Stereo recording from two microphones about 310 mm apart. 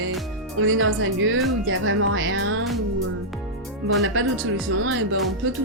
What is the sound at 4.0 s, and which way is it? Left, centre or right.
Speech, right.